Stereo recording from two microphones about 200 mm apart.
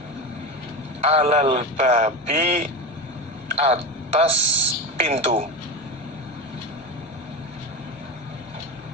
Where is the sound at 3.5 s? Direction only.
30° right (ahead or behind).